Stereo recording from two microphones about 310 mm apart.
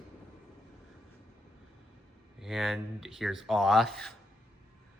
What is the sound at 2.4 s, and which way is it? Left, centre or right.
Speech, centre.